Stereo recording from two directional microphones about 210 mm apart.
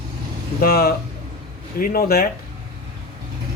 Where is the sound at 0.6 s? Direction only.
45° left (ahead or behind).